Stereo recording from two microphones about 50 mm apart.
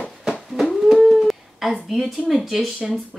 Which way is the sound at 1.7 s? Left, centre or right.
Centre.